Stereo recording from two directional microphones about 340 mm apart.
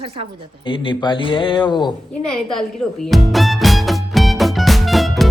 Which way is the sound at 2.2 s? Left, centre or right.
Centre.